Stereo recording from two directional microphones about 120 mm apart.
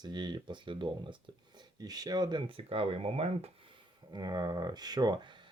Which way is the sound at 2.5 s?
50° right (ahead or behind).